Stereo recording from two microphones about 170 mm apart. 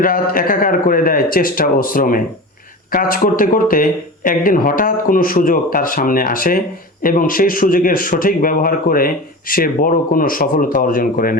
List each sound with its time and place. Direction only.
0.0 s a man's voice: 55° left (ahead or behind)